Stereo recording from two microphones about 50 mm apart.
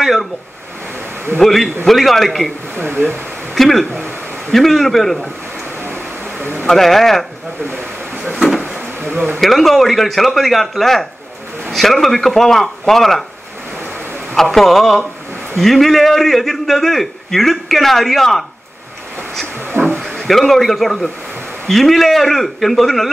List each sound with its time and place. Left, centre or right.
0.0 s a sound: centre
1.4 s a man's voice: centre
2.7 s speech: right
3.5 s a man's voice: centre
6.6 s a man's voice: centre
9.0 s speech: right
9.4 s a man's voice: centre
14.3 s a man's voice: centre
19.7 s a sound: right
20.2 s a man's voice: centre